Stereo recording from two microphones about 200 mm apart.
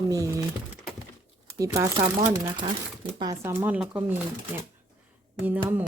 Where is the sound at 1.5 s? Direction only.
15° right (ahead or behind).